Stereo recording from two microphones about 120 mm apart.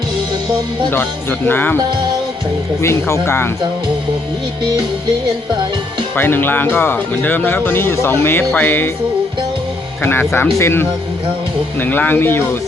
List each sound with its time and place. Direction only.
1.5 s speech: 15° left (ahead or behind)
2.8 s speech: 25° left (ahead or behind)
6.1 s speech: 15° left (ahead or behind)
10.0 s speech: 20° left (ahead or behind)